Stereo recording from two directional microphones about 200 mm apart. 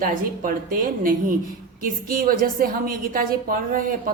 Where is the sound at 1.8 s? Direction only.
45° right (ahead or behind).